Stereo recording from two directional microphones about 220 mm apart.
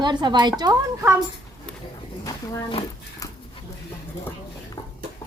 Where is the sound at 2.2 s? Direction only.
20° left (ahead or behind).